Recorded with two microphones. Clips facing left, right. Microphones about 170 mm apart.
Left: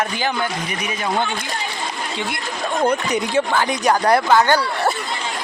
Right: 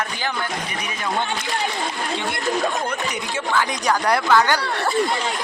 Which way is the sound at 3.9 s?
25° left (ahead or behind).